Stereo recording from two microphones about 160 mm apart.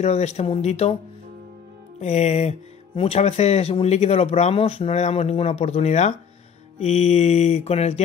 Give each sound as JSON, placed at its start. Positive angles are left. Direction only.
{"t": 0.0, "sound": "mantra", "side_deg": 45}
{"t": 2.0, "sound": "mantra", "side_deg": 45}
{"t": 3.0, "sound": "speech", "side_deg": 40}
{"t": 6.8, "sound": "mantra", "side_deg": 45}